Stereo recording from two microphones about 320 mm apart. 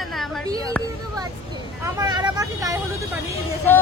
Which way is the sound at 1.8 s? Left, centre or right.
Centre.